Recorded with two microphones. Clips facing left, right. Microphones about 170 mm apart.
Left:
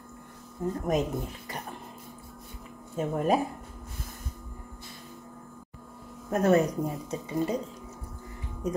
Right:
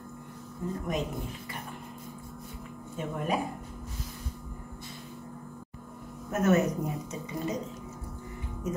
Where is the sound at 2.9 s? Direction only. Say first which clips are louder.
Left 6 dB; 40° left (ahead or behind).